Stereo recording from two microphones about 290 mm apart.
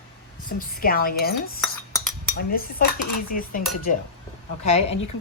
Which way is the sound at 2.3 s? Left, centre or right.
Left.